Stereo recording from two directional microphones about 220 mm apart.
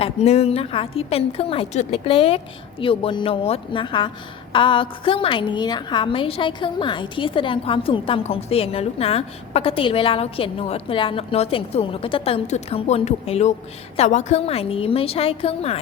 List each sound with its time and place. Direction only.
0.0 s a woman's voice: 30° left (ahead or behind)